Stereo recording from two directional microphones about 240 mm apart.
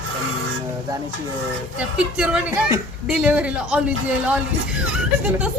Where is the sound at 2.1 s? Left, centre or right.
Centre.